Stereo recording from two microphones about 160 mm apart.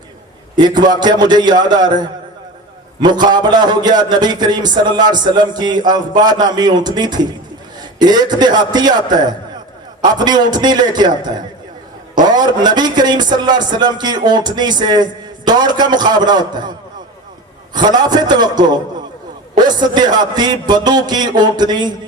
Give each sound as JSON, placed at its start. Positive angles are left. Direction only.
{"t": 0.5, "sound": "speech", "side_deg": -25}
{"t": 17.7, "sound": "speech", "side_deg": -25}